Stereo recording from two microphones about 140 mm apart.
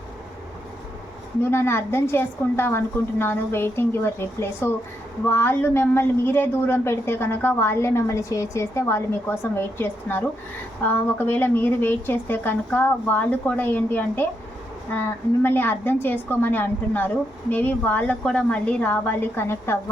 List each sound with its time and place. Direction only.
1.4 s a woman's voice: 15° left (ahead or behind)
15.4 s a woman's voice: 15° left (ahead or behind)